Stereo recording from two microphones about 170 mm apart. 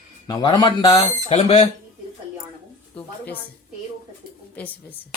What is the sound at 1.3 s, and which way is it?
Speech, 35° left (ahead or behind).